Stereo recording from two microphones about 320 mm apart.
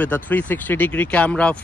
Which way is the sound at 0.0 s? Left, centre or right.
Centre.